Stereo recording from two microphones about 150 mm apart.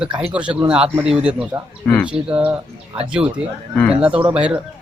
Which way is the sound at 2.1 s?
5° right (ahead or behind).